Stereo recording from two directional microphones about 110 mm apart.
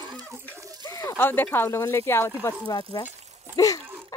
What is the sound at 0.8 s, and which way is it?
Speech, 25° left (ahead or behind).